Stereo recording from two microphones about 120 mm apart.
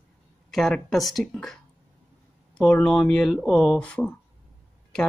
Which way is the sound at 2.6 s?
5° left (ahead or behind).